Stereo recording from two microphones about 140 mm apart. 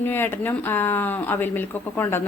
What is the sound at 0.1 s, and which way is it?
Speech, 15° left (ahead or behind).